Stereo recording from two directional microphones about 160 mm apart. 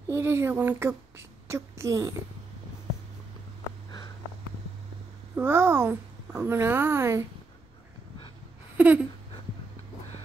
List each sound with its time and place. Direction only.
0.1 s a woman's voice: 15° right (ahead or behind)
5.3 s speech: 15° right (ahead or behind)
8.7 s a sound: 10° right (ahead or behind)